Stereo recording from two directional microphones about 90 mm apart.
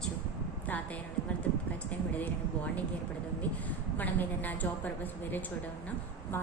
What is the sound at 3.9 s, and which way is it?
Speech, 20° left (ahead or behind).